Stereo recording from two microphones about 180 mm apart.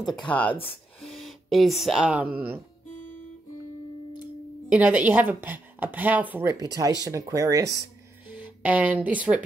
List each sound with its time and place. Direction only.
0.0 s speech: 5° left (ahead or behind)
4.6 s speech: 10° right (ahead or behind)